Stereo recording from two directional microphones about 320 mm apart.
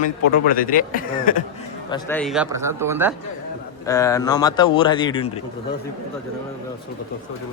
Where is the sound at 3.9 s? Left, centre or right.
Centre.